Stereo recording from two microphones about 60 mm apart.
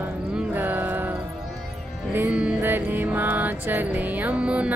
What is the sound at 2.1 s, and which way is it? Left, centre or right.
Music, right.